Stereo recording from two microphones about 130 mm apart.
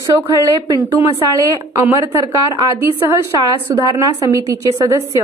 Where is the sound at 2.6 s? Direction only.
25° right (ahead or behind).